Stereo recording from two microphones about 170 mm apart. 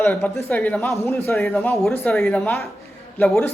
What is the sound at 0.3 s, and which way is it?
A man's voice, 15° left (ahead or behind).